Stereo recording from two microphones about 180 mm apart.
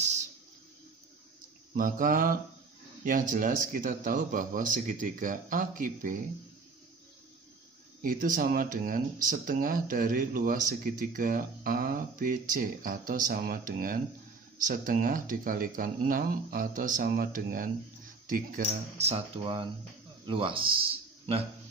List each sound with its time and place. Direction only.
1.8 s speech: 50° right (ahead or behind)
8.0 s speech: 50° right (ahead or behind)
18.7 s a man's voice: 35° right (ahead or behind)